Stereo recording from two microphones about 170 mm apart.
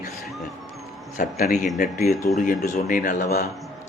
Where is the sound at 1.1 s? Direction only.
55° left (ahead or behind).